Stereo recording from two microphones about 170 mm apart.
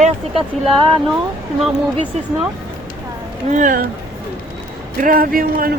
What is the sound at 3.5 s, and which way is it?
Speech, 50° right (ahead or behind).